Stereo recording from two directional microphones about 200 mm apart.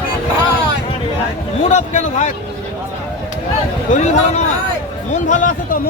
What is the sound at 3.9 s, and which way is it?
Speech, 35° left (ahead or behind).